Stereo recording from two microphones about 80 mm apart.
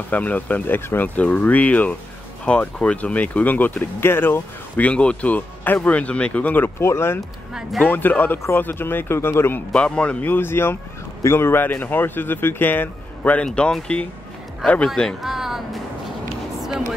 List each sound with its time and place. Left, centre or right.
0.1 s speech: centre
7.2 s speech: centre
7.8 s speech: left
9.8 s speech: centre
15.2 s music: centre